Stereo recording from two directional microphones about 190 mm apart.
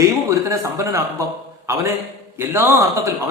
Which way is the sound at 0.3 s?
15° right (ahead or behind).